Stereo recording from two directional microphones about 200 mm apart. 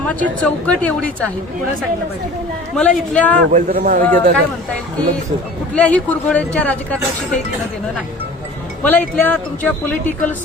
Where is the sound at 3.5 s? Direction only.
40° right (ahead or behind).